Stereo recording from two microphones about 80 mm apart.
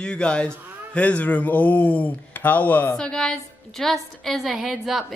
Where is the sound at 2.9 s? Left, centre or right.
Centre.